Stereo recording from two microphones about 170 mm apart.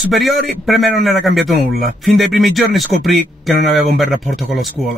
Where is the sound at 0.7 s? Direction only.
Centre (ahead or behind).